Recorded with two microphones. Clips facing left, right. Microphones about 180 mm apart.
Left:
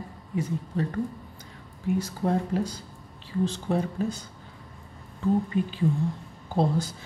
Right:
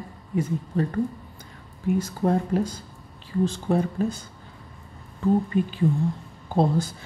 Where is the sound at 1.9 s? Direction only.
50° right (ahead or behind).